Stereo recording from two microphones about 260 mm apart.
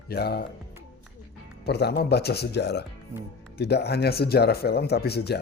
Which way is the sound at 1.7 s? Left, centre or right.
Left.